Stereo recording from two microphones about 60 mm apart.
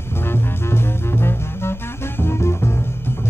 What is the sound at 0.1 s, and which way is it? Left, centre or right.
Music, left.